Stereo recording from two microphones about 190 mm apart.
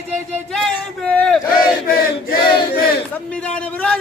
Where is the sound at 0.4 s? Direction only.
Centre (ahead or behind).